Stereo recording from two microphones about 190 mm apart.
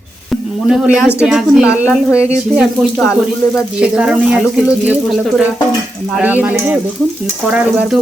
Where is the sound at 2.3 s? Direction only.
40° right (ahead or behind).